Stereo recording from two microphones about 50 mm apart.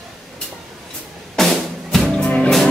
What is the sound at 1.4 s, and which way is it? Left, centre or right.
Music, centre.